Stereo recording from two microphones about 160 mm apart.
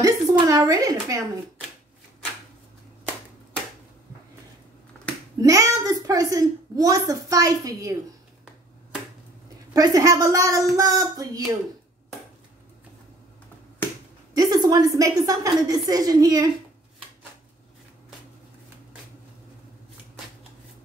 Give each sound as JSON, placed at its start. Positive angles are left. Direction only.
{"t": 0.0, "sound": "a woman's voice", "side_deg": -20}
{"t": 5.4, "sound": "a woman's voice", "side_deg": -20}
{"t": 9.8, "sound": "a woman's voice", "side_deg": -25}
{"t": 14.3, "sound": "a woman's voice", "side_deg": -25}